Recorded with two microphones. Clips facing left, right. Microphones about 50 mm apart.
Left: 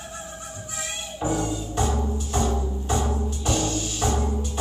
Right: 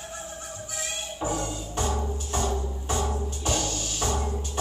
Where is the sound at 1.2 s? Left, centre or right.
Left.